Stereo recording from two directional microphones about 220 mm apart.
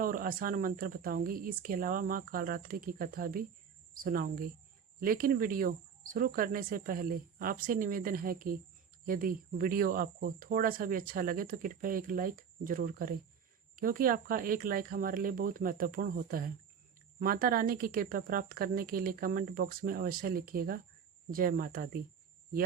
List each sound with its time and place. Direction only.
0.0 s speech: 40° right (ahead or behind)